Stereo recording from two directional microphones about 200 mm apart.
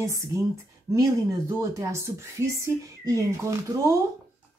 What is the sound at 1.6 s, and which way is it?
Speech, 15° right (ahead or behind).